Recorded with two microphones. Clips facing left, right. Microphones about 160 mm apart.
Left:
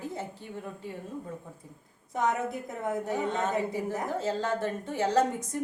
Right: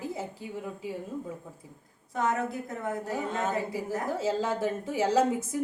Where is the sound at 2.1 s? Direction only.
20° left (ahead or behind).